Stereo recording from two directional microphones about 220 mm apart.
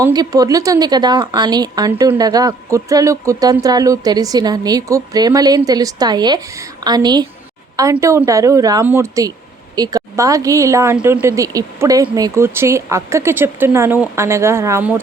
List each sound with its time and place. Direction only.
0.0 s speech: 15° right (ahead or behind)